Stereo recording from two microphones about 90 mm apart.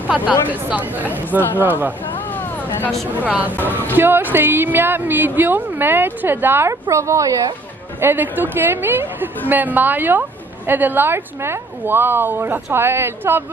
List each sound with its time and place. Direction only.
0.1 s a woman's voice: 15° right (ahead or behind)
3.1 s a woman's voice: 15° right (ahead or behind)
3.5 s speech: 20° left (ahead or behind)
3.9 s a woman's voice: 25° right (ahead or behind)
8.0 s a woman's voice: 20° right (ahead or behind)